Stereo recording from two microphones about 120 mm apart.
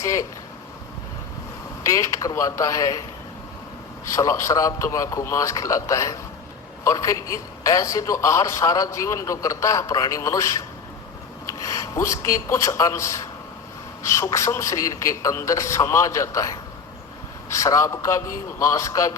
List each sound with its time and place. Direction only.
0.0 s a man's voice: 25° left (ahead or behind)
1.8 s a man's voice: 25° left (ahead or behind)
4.1 s a man's voice: 25° left (ahead or behind)